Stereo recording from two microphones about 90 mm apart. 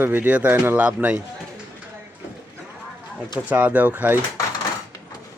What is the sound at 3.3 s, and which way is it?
Speech, 15° right (ahead or behind).